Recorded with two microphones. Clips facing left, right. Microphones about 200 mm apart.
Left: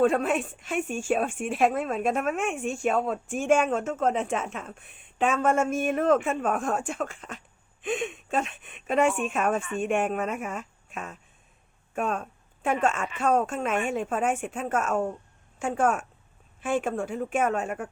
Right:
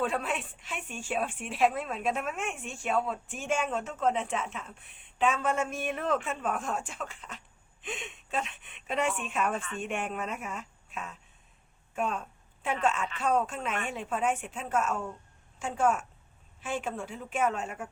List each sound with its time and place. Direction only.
0.0 s a woman's voice: 45° left (ahead or behind)
11.9 s a sound: 50° left (ahead or behind)
12.8 s a woman's voice: 45° left (ahead or behind)